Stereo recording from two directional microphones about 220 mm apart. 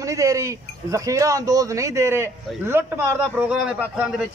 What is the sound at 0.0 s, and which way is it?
Speech, 15° right (ahead or behind).